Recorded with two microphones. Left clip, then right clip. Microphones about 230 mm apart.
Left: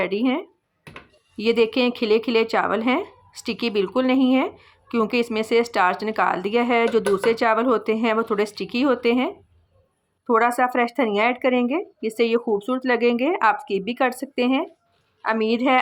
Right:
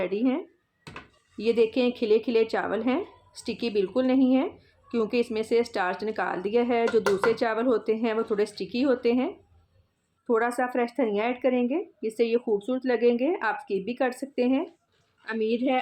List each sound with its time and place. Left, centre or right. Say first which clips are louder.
0.0 s speech: left 4 dB; centre